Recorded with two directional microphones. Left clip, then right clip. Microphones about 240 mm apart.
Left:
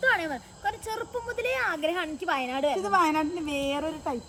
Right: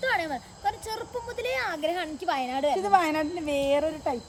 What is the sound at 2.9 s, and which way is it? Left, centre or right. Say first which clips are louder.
A woman's voice: right 1 dB; right.